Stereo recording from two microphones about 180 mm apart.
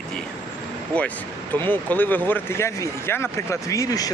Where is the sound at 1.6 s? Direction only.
10° left (ahead or behind).